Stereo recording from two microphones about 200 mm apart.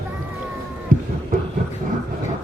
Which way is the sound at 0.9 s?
45° right (ahead or behind).